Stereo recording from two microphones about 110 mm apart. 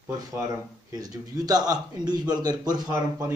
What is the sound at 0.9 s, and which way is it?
A man's voice, 35° right (ahead or behind).